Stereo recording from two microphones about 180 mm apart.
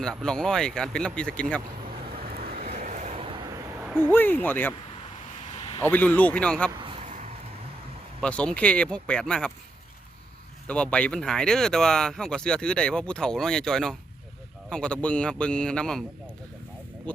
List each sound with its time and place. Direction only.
0.0 s speech: 5° left (ahead or behind)
2.6 s vehicle: 45° right (ahead or behind)
3.9 s speech: 10° left (ahead or behind)
5.5 s a sound: 30° left (ahead or behind)
5.8 s speech: 10° left (ahead or behind)
8.2 s speech: 5° left (ahead or behind)
10.7 s speech: 5° left (ahead or behind)